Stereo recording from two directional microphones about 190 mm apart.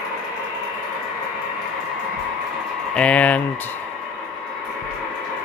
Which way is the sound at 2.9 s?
5° left (ahead or behind).